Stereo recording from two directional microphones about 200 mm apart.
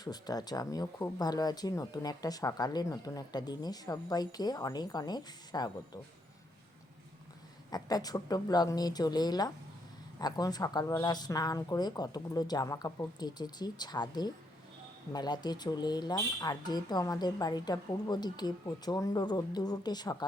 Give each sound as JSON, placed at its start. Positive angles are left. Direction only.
{"t": 0.0, "sound": "speech", "side_deg": 20}
{"t": 7.7, "sound": "speech", "side_deg": 20}